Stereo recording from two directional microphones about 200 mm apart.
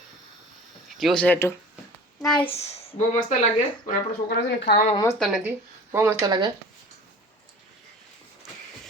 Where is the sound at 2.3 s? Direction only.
25° left (ahead or behind).